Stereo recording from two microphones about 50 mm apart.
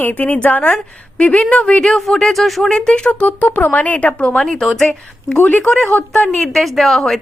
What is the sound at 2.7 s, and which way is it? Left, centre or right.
Speech, centre.